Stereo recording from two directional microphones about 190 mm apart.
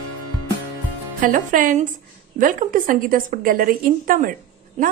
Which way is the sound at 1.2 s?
45° right (ahead or behind).